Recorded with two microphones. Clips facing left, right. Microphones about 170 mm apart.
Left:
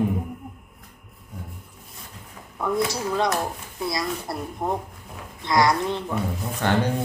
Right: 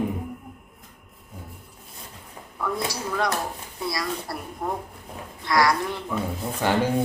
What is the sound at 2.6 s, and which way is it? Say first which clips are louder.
Speech: left 4 dB; 20° left (ahead or behind).